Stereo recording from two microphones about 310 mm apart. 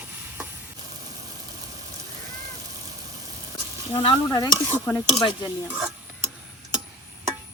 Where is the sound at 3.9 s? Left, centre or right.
Centre.